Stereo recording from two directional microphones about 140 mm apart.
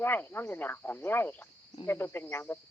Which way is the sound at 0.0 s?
15° left (ahead or behind).